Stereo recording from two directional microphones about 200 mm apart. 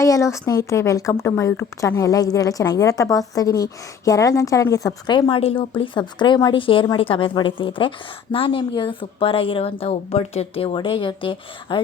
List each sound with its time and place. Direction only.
0.0 s speech: 15° left (ahead or behind)